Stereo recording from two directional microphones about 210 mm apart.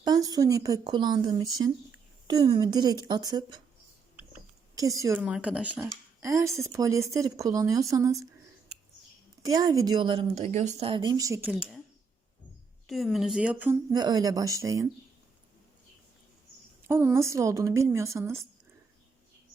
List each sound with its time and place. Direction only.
0.0 s speech: 20° right (ahead or behind)
4.2 s a sound: 10° right (ahead or behind)
5.2 s speech: 5° right (ahead or behind)
9.4 s speech: 15° right (ahead or behind)
12.9 s a woman's voice: centre (ahead or behind)
13.9 s speech: 20° right (ahead or behind)
16.8 s speech: 10° right (ahead or behind)